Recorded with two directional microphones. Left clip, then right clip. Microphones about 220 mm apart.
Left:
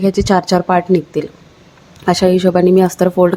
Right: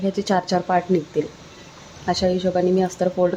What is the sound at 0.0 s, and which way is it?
Speech, 25° left (ahead or behind).